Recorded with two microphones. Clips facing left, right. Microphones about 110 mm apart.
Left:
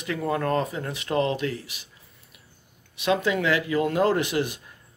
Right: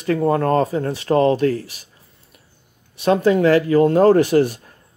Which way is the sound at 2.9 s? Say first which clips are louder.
Right 8 dB; 40° right (ahead or behind).